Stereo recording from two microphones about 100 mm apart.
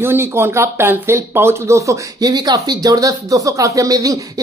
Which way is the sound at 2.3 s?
45° right (ahead or behind).